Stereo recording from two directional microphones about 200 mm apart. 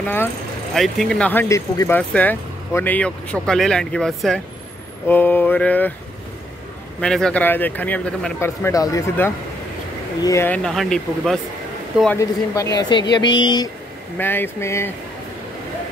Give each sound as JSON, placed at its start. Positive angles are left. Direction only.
{"t": 0.0, "sound": "speech", "side_deg": 10}
{"t": 7.0, "sound": "speech", "side_deg": 5}
{"t": 12.2, "sound": "a woman's voice", "side_deg": 15}
{"t": 14.1, "sound": "speech", "side_deg": 10}